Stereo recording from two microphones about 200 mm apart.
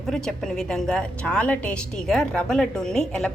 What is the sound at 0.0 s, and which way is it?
A woman's voice, 5° left (ahead or behind).